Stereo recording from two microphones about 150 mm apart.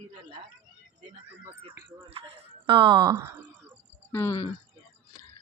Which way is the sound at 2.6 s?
35° right (ahead or behind).